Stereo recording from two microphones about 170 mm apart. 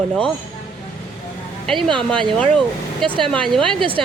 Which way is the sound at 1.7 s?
Centre (ahead or behind).